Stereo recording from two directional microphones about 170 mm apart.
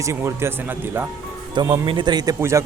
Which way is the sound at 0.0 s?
15° right (ahead or behind).